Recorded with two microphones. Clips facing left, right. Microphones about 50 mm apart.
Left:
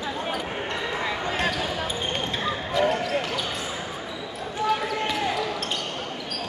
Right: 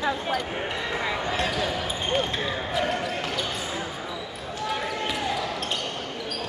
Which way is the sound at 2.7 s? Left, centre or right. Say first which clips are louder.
Left 5 dB; centre.